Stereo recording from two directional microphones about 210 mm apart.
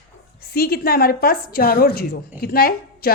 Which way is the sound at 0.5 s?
45° left (ahead or behind).